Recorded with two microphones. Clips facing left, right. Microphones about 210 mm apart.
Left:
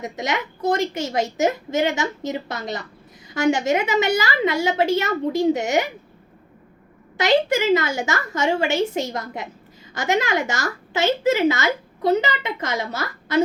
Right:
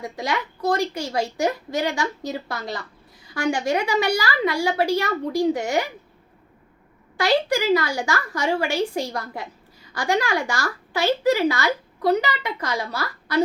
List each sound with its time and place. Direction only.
0.0 s a woman's voice: 20° left (ahead or behind)
7.2 s a woman's voice: 20° left (ahead or behind)